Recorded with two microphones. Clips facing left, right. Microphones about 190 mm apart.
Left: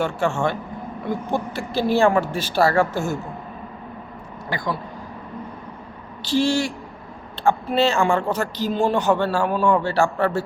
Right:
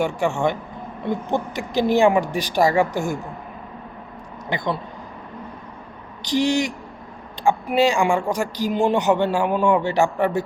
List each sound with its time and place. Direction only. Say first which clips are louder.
0.0 s speech: right 1 dB; 15° right (ahead or behind)
4.4 s speech: right 2 dB; 20° right (ahead or behind)
6.2 s speech: even; 15° right (ahead or behind)